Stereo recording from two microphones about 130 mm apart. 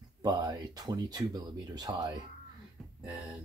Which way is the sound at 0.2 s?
30° right (ahead or behind).